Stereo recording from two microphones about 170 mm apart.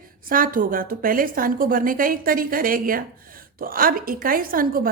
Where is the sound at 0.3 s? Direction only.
55° right (ahead or behind).